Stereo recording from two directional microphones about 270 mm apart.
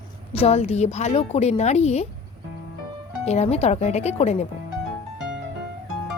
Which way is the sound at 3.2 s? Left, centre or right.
Left.